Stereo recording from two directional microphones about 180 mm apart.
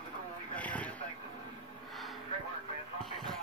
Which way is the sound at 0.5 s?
10° left (ahead or behind).